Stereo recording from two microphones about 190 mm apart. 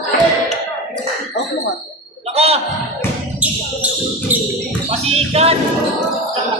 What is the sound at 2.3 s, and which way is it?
Music, 30° right (ahead or behind).